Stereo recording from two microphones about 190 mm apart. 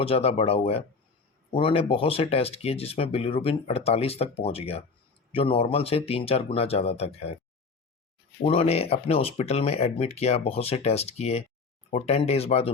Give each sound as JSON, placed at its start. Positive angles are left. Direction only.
{"t": 0.0, "sound": "speech", "side_deg": 30}
{"t": 8.4, "sound": "speech", "side_deg": 30}